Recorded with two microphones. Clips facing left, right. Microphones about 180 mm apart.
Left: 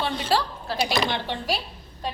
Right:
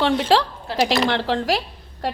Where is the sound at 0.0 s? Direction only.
90° right.